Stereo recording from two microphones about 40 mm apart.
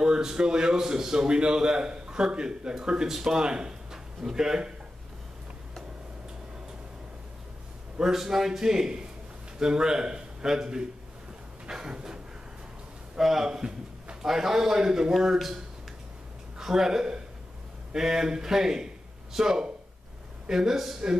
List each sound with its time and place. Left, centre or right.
0.0 s a man's voice: centre
8.0 s a man's voice: centre
11.9 s a man's voice: centre
13.2 s speech: centre
13.5 s a sound: centre
14.2 s a man's voice: centre
15.1 s a man's voice: centre